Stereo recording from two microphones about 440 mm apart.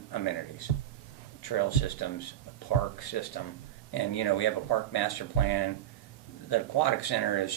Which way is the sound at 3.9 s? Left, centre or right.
Left.